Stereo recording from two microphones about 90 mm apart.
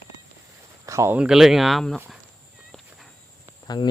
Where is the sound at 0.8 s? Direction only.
35° right (ahead or behind).